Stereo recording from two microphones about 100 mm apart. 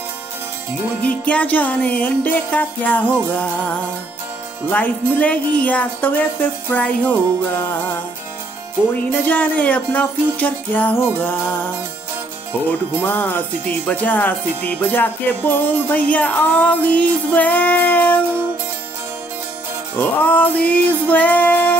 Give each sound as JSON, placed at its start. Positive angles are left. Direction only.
{"t": 1.0, "sound": "music", "side_deg": 15}
{"t": 9.1, "sound": "music", "side_deg": 15}
{"t": 13.0, "sound": "music", "side_deg": 20}
{"t": 20.0, "sound": "music", "side_deg": 15}